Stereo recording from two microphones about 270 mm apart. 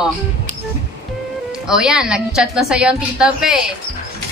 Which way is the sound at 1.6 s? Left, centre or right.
Centre.